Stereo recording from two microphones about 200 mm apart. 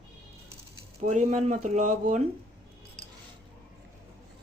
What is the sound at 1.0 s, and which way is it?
Speech, 35° right (ahead or behind).